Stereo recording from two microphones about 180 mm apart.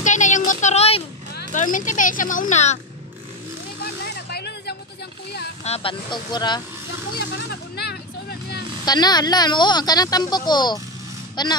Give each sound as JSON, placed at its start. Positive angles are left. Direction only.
{"t": 0.0, "sound": "a sound", "side_deg": 45}
{"t": 1.5, "sound": "speech", "side_deg": 45}
{"t": 4.3, "sound": "music", "side_deg": 65}
{"t": 5.6, "sound": "speech", "side_deg": 35}
{"t": 7.2, "sound": "vehicle", "side_deg": 65}
{"t": 8.8, "sound": "speech", "side_deg": 25}